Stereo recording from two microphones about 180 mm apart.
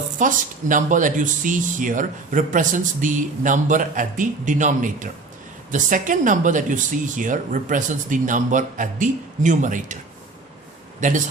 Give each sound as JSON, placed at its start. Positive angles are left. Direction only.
{"t": 0.2, "sound": "speech", "side_deg": -45}
{"t": 11.0, "sound": "speech", "side_deg": -45}